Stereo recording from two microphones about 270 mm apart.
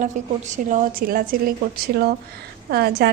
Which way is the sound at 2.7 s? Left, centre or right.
Right.